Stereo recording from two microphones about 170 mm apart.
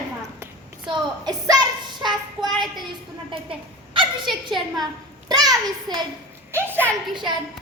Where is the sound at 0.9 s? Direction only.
25° right (ahead or behind).